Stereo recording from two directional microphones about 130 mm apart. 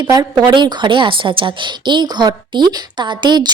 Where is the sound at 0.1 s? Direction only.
35° right (ahead or behind).